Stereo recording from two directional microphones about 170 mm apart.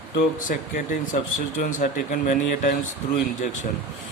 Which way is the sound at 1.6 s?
50° left (ahead or behind).